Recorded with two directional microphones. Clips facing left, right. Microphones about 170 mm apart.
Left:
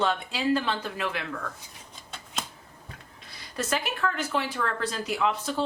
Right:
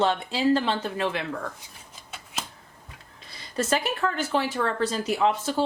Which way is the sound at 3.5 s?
25° right (ahead or behind).